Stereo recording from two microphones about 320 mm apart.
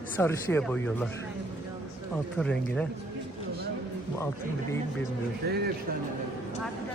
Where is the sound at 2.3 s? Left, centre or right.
Centre.